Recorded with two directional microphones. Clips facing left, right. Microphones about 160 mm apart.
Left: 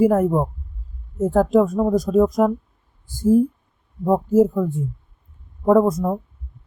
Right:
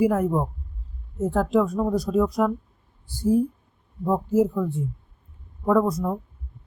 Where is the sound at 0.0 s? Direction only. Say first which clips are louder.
Left 5 dB; 45° left (ahead or behind).